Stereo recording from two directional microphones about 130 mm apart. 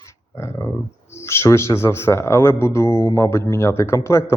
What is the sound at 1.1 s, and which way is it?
Speech, 20° left (ahead or behind).